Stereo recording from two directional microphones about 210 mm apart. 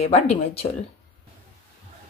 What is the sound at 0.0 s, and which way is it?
Speech, 30° left (ahead or behind).